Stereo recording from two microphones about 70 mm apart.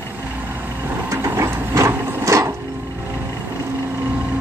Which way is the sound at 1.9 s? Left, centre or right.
Right.